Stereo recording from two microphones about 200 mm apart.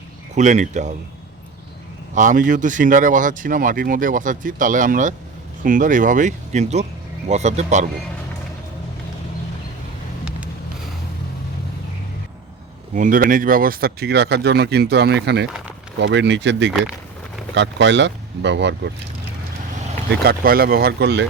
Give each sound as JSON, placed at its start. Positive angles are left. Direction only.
{"t": 0.3, "sound": "speech", "side_deg": -35}
{"t": 2.1, "sound": "speech", "side_deg": -40}
{"t": 12.9, "sound": "speech", "side_deg": -40}
{"t": 20.2, "sound": "speech", "side_deg": -50}